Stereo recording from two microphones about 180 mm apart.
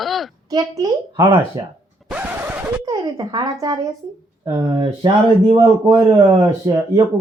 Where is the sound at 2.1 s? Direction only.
10° right (ahead or behind).